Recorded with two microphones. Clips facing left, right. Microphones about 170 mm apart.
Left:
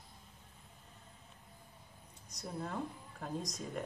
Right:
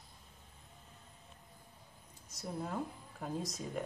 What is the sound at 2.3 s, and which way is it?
Speech, 5° right (ahead or behind).